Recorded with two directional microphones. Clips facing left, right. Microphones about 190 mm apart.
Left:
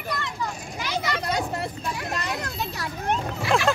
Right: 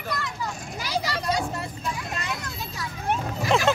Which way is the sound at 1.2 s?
65° left (ahead or behind).